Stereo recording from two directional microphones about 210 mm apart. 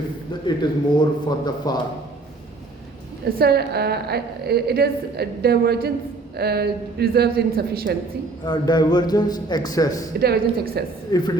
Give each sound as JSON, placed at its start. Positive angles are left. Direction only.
{"t": 0.4, "sound": "a man's voice", "side_deg": 20}
{"t": 3.2, "sound": "a woman's voice", "side_deg": -45}
{"t": 8.4, "sound": "a man's voice", "side_deg": 20}
{"t": 10.2, "sound": "a woman's voice", "side_deg": -50}
{"t": 11.1, "sound": "a man's voice", "side_deg": 20}